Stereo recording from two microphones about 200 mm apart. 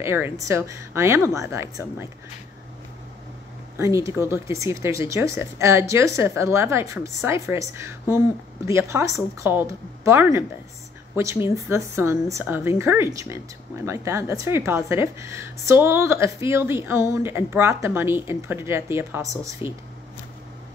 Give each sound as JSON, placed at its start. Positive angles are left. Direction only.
{"t": 0.0, "sound": "speech", "side_deg": -10}
{"t": 3.7, "sound": "speech", "side_deg": -15}